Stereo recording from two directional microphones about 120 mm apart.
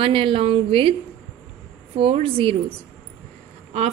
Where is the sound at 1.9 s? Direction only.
50° right (ahead or behind).